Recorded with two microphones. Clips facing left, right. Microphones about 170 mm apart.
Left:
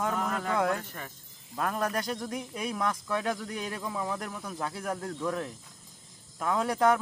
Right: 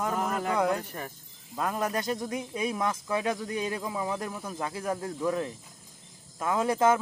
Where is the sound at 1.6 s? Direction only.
Centre (ahead or behind).